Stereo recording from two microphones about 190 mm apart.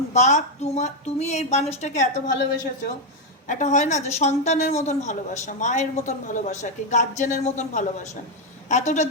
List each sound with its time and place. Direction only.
0.1 s a woman's voice: 40° left (ahead or behind)
2.3 s a woman's voice: 65° left (ahead or behind)
3.4 s a woman's voice: 40° left (ahead or behind)